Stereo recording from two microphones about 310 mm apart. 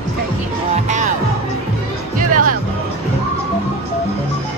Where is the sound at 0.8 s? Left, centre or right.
Right.